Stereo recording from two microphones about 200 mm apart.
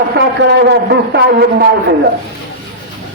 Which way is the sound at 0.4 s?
55° right (ahead or behind).